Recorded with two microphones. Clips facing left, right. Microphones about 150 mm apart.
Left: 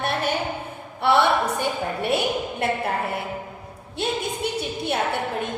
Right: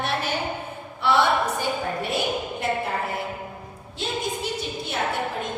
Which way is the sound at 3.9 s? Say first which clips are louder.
Left 2 dB; 60° left (ahead or behind).